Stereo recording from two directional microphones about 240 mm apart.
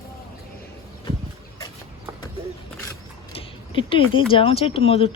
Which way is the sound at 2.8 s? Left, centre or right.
Centre.